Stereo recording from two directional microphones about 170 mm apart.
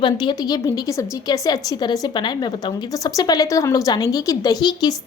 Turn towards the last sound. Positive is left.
turn(degrees=25)  # may be behind; listen again after turning